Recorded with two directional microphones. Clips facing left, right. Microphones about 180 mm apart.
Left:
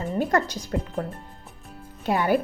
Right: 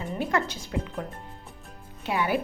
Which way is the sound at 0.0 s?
40° left (ahead or behind).